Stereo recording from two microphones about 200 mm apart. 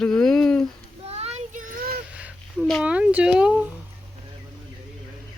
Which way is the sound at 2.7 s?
5° right (ahead or behind).